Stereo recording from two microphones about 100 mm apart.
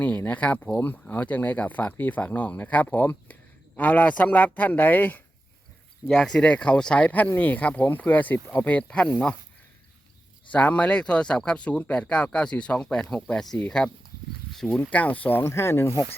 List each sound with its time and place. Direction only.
0.0 s speech: 15° left (ahead or behind)
6.1 s speech: 5° left (ahead or behind)
10.5 s speech: 15° left (ahead or behind)